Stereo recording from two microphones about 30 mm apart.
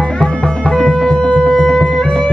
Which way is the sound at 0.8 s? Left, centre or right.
Left.